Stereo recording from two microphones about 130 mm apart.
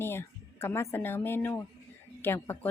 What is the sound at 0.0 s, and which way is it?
Speech, 20° left (ahead or behind).